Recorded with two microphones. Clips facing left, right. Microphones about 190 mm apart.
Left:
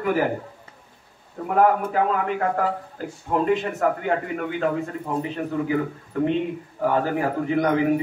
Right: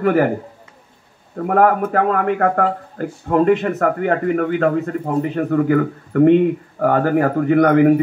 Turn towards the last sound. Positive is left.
turn(degrees=-60)  # may be behind; listen again after turning